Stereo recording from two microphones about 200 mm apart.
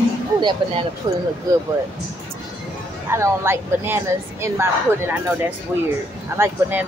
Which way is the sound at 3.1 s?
10° right (ahead or behind).